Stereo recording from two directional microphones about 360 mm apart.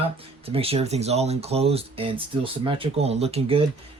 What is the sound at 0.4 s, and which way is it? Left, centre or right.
Speech, centre.